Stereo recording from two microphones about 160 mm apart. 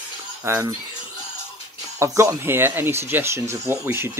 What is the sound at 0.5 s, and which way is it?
Speech, 15° right (ahead or behind).